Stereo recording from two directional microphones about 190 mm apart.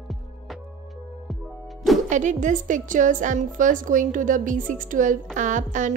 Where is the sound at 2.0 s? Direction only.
40° right (ahead or behind).